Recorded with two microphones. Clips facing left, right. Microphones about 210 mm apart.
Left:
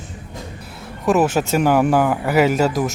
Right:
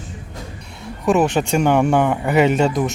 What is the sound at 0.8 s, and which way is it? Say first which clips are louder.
Speech: even; centre (ahead or behind).